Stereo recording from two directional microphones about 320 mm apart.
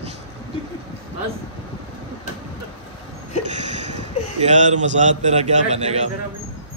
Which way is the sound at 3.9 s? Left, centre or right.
Right.